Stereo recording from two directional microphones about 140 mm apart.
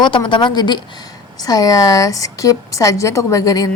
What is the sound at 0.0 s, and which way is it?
A woman's voice, 35° left (ahead or behind).